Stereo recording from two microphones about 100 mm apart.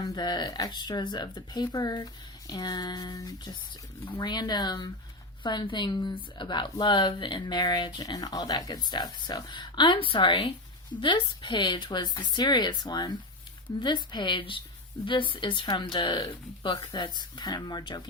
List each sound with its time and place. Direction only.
0.1 s speech: 45° left (ahead or behind)